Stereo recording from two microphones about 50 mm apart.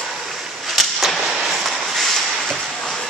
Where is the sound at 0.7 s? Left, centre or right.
Centre.